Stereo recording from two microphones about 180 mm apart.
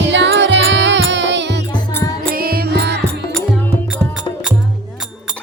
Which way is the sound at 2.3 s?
55° right (ahead or behind).